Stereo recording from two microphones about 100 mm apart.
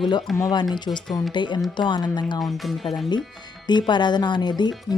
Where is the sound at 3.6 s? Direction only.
50° left (ahead or behind).